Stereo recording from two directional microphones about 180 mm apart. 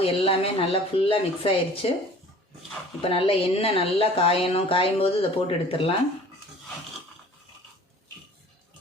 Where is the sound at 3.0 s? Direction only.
30° left (ahead or behind).